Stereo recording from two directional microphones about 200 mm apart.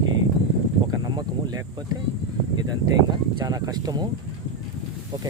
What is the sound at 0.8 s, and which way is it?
Speech, 20° right (ahead or behind).